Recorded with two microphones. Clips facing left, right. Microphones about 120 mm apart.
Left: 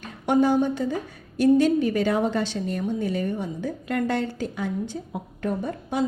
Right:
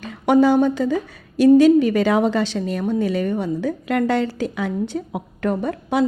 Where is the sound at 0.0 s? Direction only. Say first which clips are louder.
Right 5 dB; 90° right.